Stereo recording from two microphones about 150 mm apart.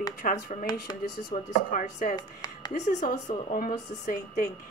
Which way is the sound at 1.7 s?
55° left (ahead or behind).